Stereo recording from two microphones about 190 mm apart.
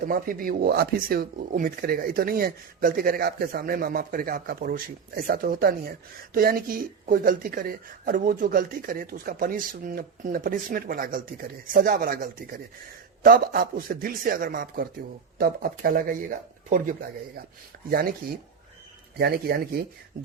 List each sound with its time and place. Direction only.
0.0 s speech: 50° right (ahead or behind)
19.2 s speech: 55° right (ahead or behind)